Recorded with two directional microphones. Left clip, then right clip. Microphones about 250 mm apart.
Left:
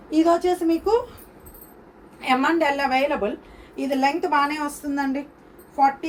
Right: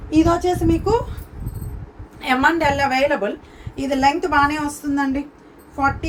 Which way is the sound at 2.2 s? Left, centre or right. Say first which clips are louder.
Right 3 dB; centre.